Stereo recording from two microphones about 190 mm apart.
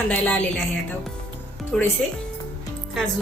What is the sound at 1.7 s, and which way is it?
Speech, 5° left (ahead or behind).